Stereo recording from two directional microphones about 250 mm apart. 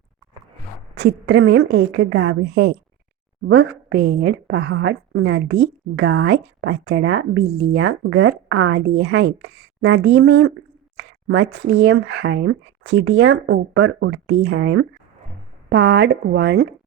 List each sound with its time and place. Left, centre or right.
0.9 s a woman's voice: right